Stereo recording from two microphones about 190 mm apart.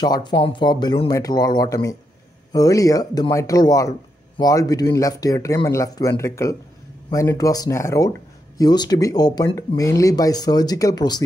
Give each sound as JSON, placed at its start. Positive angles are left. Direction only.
{"t": 0.0, "sound": "speech", "side_deg": 20}